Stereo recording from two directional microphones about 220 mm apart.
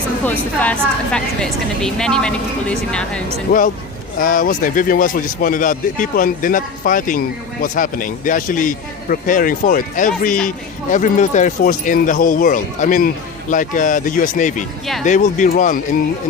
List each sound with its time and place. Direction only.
0.3 s a woman's voice: 5° left (ahead or behind)
3.5 s speech: 45° left (ahead or behind)